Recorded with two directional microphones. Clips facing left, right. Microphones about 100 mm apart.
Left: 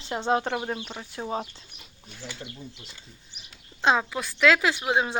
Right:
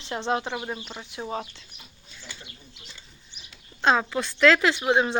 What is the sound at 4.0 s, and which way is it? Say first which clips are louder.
A woman's voice: right 3 dB; 5° left (ahead or behind).